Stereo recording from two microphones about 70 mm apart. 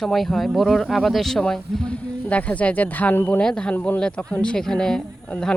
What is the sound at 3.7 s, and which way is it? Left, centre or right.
Speech, left.